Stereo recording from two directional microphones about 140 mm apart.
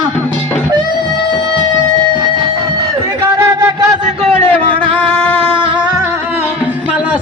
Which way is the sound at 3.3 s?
20° right (ahead or behind).